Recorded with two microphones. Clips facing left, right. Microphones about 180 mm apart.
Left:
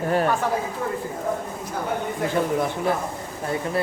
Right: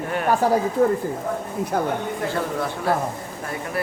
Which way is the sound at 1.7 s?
65° right (ahead or behind).